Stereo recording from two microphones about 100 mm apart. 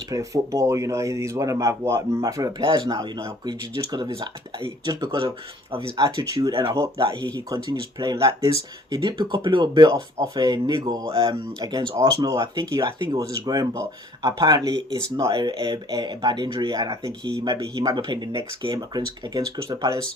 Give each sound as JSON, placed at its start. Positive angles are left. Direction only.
{"t": 0.1, "sound": "speech", "side_deg": -35}
{"t": 2.6, "sound": "speech", "side_deg": -50}
{"t": 6.7, "sound": "speech", "side_deg": -30}
{"t": 6.9, "sound": "speech", "side_deg": -50}
{"t": 11.0, "sound": "speech", "side_deg": -60}
{"t": 11.3, "sound": "speech", "side_deg": -40}
{"t": 15.3, "sound": "speech", "side_deg": -50}